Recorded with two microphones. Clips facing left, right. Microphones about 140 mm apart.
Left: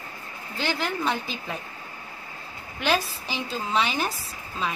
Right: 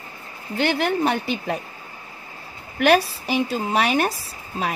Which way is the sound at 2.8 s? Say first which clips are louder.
Right 8 dB; 65° right (ahead or behind).